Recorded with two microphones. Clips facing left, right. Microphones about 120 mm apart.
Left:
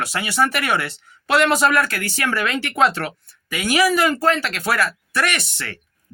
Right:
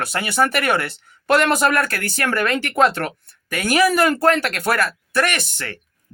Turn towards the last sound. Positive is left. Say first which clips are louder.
# right 1 dB
turn(degrees=-45)  # may be behind; listen again after turning